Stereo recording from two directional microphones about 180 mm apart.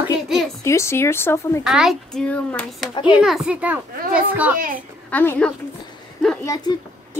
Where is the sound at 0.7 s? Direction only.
15° left (ahead or behind).